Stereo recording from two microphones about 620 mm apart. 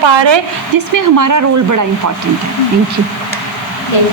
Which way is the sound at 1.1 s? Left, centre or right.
Right.